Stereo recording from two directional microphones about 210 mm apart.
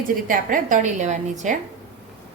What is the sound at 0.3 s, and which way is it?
A woman's voice, 40° right (ahead or behind).